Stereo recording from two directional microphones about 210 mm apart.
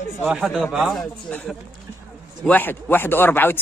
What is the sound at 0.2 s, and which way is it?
Speech, centre (ahead or behind).